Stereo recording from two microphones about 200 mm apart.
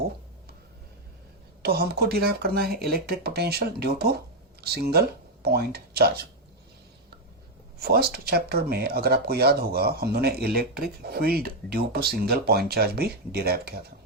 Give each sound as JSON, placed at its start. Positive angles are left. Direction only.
{"t": 1.6, "sound": "speech", "side_deg": -50}
{"t": 7.8, "sound": "speech", "side_deg": -50}